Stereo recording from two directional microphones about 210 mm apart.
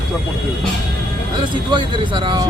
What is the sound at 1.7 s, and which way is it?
Speech, 20° right (ahead or behind).